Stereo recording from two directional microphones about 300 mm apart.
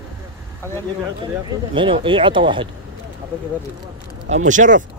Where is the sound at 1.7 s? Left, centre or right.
Centre.